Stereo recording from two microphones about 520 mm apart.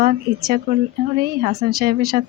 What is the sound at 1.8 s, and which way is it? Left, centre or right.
Speech, centre.